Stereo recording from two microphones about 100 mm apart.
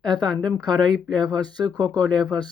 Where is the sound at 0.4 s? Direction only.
5° left (ahead or behind).